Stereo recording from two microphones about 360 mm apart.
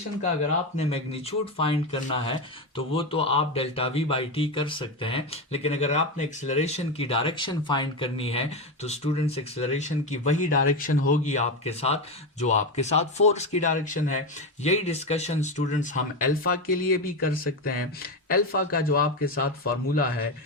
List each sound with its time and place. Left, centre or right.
0.8 s speech: centre